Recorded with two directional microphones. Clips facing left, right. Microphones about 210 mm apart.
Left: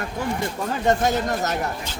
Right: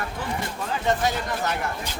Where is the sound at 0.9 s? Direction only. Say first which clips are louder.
Left 4 dB; 45° left (ahead or behind).